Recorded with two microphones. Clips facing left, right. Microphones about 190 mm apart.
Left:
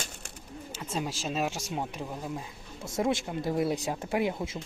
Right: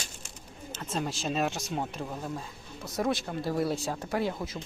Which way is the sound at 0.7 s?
10° left (ahead or behind).